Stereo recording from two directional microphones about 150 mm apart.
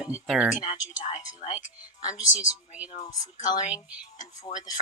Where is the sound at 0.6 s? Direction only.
35° left (ahead or behind).